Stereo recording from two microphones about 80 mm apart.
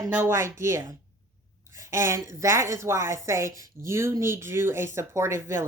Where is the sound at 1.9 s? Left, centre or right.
Right.